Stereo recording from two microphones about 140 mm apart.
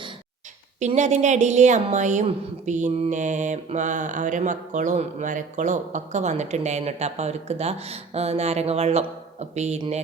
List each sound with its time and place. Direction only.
0.8 s a woman's voice: 55° right (ahead or behind)